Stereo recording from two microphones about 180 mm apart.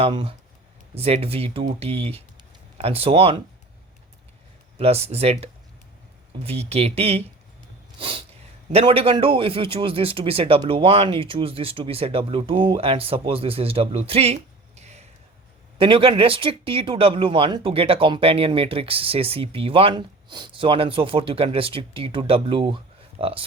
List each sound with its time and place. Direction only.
0.0 s a man's voice: 30° right (ahead or behind)
4.8 s a man's voice: 35° right (ahead or behind)
7.9 s snort: 30° right (ahead or behind)
8.7 s a man's voice: 30° right (ahead or behind)
14.8 s a sound: 40° right (ahead or behind)
15.8 s speech: 30° right (ahead or behind)